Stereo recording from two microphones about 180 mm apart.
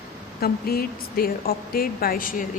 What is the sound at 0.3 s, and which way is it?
Speech, 60° left (ahead or behind).